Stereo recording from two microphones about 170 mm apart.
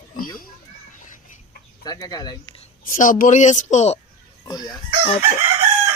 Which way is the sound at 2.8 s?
50° left (ahead or behind).